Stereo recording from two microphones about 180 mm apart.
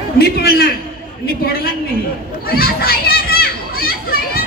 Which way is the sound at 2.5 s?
55° left (ahead or behind).